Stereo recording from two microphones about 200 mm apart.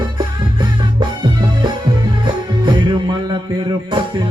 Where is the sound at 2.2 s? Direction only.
20° right (ahead or behind).